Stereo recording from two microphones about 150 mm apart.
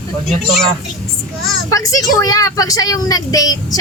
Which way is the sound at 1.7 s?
20° left (ahead or behind).